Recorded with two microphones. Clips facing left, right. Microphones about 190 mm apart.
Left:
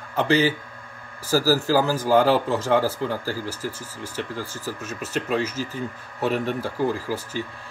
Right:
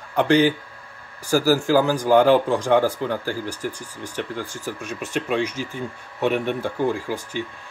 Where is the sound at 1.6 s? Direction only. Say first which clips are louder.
Right 2 dB; 15° right (ahead or behind).